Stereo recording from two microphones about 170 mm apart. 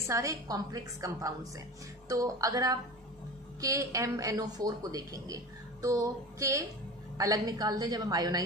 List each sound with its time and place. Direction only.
0.0 s a woman's voice: 20° right (ahead or behind)